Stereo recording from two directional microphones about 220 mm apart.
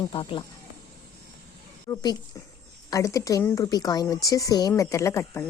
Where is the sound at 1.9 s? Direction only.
20° left (ahead or behind).